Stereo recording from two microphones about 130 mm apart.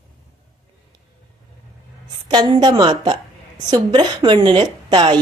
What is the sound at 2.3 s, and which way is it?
Speech, 35° right (ahead or behind).